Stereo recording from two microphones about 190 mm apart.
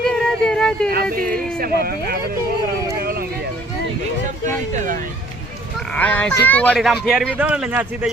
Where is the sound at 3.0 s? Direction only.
50° right (ahead or behind).